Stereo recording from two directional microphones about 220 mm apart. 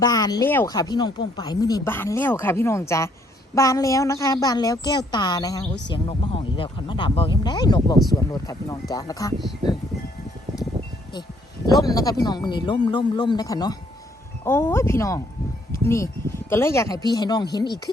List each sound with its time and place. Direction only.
0.0 s speech: 15° left (ahead or behind)
11.6 s speech: 15° left (ahead or behind)